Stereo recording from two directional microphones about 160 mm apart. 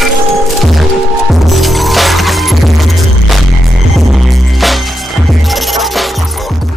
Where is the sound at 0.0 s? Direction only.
Centre (ahead or behind).